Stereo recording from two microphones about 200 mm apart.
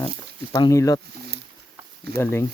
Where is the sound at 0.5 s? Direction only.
20° left (ahead or behind).